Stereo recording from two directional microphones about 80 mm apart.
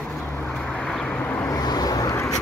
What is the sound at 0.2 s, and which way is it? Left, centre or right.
Vehicle, left.